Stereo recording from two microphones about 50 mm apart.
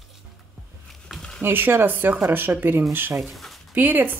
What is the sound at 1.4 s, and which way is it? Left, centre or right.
Speech, right.